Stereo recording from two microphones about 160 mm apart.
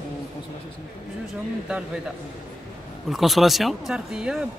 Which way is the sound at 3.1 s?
Centre (ahead or behind).